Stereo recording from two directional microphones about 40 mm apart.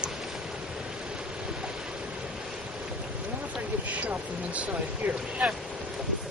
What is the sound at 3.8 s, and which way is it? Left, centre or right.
Speech, right.